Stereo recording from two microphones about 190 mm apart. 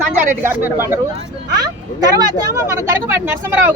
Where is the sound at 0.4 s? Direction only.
10° right (ahead or behind).